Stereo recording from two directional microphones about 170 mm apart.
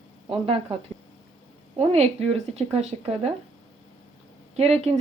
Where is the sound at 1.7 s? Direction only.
40° right (ahead or behind).